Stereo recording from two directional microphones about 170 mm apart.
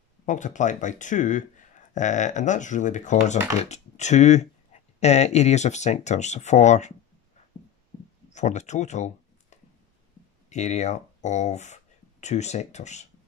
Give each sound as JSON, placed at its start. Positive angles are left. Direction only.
{"t": 0.2, "sound": "speech", "side_deg": 45}
{"t": 8.3, "sound": "speech", "side_deg": 45}